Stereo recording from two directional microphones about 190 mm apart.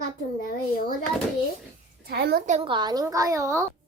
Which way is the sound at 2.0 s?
60° right (ahead or behind).